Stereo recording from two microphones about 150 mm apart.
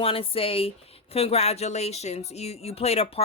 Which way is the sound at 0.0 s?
40° left (ahead or behind).